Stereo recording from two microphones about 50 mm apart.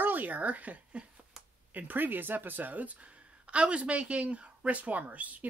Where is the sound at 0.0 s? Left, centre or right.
Right.